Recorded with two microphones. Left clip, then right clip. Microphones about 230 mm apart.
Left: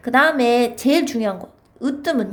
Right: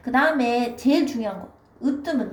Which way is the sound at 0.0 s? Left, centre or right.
Left.